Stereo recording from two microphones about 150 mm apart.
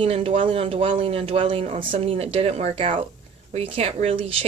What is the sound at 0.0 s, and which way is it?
Speech, 40° right (ahead or behind).